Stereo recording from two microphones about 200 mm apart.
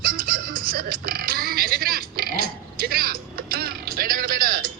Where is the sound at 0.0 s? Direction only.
45° right (ahead or behind).